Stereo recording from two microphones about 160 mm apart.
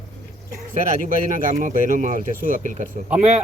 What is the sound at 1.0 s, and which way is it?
Speech, 55° right (ahead or behind).